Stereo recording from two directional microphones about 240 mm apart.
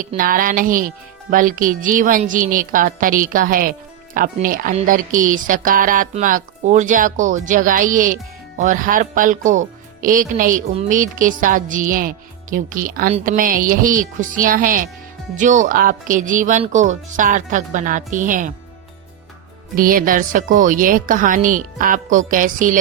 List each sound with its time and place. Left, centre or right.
0.0 s a woman's voice: right
19.7 s a woman's voice: right